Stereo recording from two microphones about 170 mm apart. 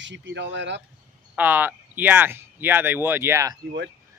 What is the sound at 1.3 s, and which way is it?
Speech, 10° right (ahead or behind).